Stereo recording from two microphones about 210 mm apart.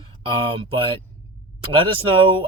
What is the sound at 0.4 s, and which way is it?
Speech, 25° right (ahead or behind).